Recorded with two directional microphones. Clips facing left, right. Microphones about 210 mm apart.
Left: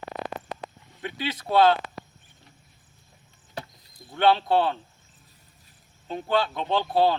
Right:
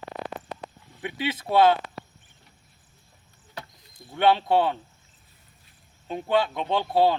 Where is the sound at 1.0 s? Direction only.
20° right (ahead or behind).